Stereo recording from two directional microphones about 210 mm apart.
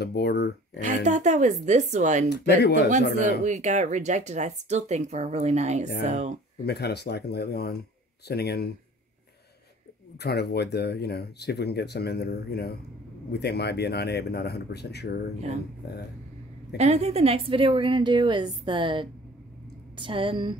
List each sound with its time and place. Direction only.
0.0 s speech: 50° left (ahead or behind)
0.7 s speech: 35° right (ahead or behind)
6.6 s speech: 50° left (ahead or behind)
10.1 s speech: 50° left (ahead or behind)
16.7 s a woman's voice: 30° right (ahead or behind)